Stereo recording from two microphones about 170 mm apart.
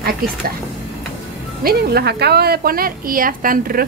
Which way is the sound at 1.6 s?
65° right (ahead or behind).